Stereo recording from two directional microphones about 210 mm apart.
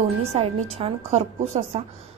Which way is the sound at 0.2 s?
30° right (ahead or behind).